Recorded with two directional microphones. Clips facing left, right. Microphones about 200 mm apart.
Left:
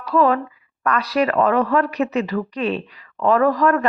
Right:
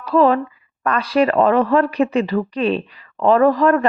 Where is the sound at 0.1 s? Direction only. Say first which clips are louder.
Right 3 dB; 30° right (ahead or behind).